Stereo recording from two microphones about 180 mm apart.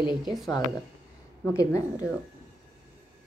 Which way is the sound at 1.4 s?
15° left (ahead or behind).